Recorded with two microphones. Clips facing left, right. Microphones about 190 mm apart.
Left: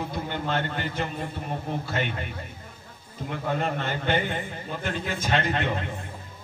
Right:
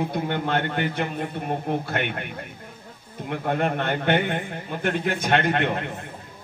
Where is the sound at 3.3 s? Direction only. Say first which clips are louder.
Right 4 dB; 60° right (ahead or behind).